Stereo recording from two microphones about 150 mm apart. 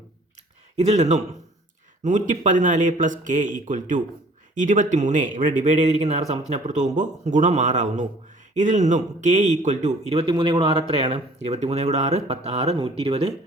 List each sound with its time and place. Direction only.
0.8 s speech: 50° right (ahead or behind)